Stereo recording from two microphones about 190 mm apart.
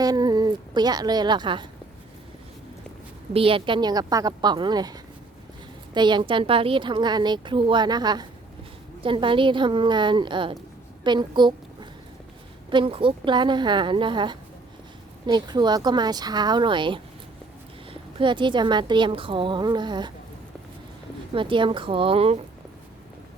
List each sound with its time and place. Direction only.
0.0 s a woman's voice: 20° right (ahead or behind)
3.3 s a woman's voice: 30° right (ahead or behind)
21.3 s a woman's voice: 25° right (ahead or behind)